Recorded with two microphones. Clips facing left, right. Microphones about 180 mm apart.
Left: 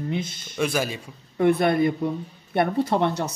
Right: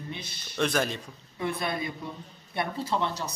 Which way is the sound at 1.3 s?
60° left (ahead or behind).